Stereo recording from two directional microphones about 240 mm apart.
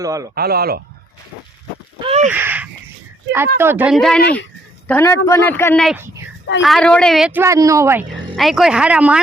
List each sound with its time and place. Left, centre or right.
0.0 s speech: centre
0.3 s speech: right
2.0 s a sound: right
2.3 s a sound: centre
3.6 s a woman's voice: centre
8.4 s a woman's voice: centre